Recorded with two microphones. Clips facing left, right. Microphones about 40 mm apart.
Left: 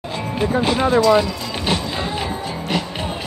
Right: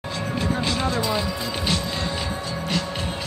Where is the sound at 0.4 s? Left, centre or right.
Left.